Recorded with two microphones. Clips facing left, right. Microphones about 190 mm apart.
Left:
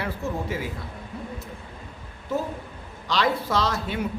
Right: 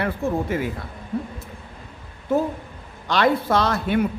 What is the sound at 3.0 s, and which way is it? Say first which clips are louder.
Speech: right 5 dB; 55° right (ahead or behind).